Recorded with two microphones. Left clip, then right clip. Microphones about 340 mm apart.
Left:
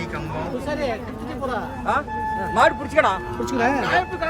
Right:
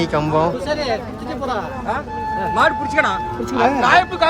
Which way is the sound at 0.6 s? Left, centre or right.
Right.